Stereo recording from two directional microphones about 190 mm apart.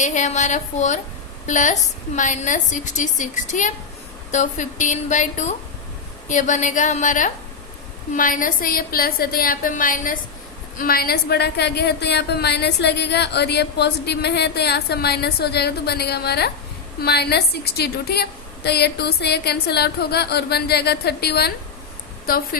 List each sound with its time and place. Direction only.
0.0 s a woman's voice: 40° left (ahead or behind); by 21.5 s 55° left (ahead or behind)